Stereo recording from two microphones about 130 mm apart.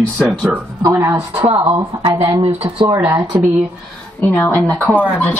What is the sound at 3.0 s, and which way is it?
Speech, 15° right (ahead or behind).